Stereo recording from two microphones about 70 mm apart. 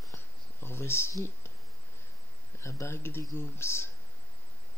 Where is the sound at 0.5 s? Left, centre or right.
Left.